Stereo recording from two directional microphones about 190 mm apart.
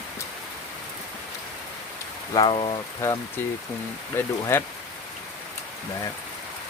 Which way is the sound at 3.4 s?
10° left (ahead or behind).